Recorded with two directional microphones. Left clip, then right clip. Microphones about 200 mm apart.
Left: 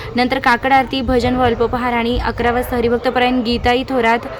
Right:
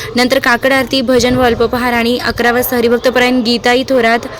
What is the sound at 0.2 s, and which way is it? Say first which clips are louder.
Speech: right 4 dB; 5° right (ahead or behind).